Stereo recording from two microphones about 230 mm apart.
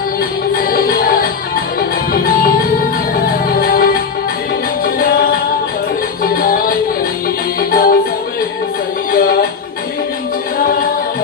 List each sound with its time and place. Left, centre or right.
0.2 s music: left
3.5 s music: left
9.1 s music: left